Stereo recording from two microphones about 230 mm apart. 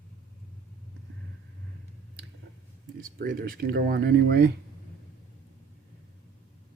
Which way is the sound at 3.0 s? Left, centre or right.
Right.